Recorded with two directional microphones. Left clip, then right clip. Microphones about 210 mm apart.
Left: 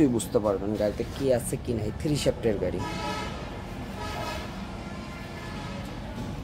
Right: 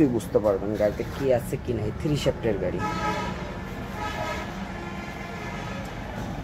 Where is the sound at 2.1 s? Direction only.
15° left (ahead or behind).